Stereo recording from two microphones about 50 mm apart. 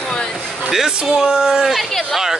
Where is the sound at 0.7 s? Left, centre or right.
Centre.